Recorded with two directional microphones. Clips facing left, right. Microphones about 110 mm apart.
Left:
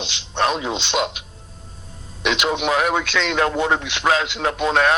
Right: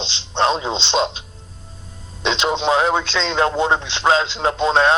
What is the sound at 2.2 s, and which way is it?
Speech, 25° right (ahead or behind).